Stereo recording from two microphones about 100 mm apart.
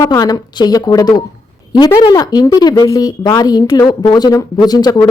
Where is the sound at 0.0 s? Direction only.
40° left (ahead or behind).